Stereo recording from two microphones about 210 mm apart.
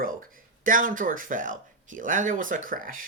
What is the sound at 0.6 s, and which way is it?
Speech, 40° right (ahead or behind).